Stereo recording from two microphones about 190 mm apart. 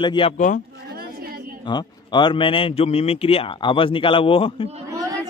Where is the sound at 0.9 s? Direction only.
55° right (ahead or behind).